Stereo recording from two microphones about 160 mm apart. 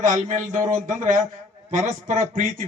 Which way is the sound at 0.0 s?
55° right (ahead or behind).